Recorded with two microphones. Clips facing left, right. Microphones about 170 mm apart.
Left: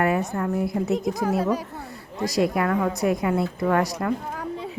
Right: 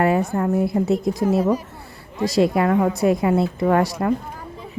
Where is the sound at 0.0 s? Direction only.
30° right (ahead or behind).